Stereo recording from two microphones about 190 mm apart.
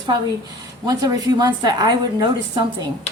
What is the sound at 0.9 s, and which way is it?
A woman's voice, 20° right (ahead or behind).